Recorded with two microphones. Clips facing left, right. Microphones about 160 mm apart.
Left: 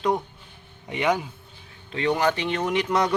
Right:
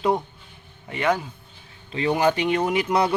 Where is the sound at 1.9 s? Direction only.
5° right (ahead or behind).